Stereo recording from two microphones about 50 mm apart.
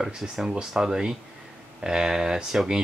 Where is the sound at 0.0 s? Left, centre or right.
Centre.